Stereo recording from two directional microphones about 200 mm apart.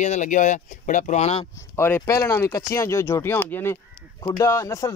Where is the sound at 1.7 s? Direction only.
10° left (ahead or behind).